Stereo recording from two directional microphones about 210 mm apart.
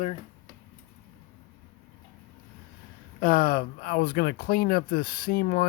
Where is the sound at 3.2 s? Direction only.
45° left (ahead or behind).